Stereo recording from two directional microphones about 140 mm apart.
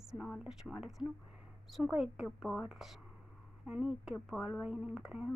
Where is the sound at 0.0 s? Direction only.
5° right (ahead or behind).